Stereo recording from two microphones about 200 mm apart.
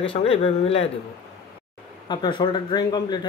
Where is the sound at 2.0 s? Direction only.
25° left (ahead or behind).